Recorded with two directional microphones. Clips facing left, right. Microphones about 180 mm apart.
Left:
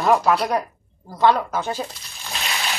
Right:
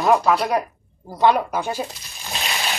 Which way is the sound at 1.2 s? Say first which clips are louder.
Right 1 dB; 15° right (ahead or behind).